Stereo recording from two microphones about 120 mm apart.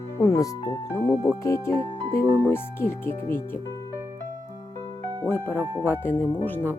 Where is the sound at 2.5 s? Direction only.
20° left (ahead or behind).